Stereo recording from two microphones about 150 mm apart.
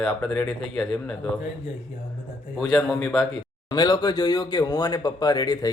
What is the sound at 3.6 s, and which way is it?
Speech, 30° left (ahead or behind).